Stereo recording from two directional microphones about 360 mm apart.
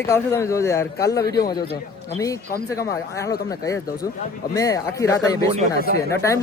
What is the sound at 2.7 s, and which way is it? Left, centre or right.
Speech, centre.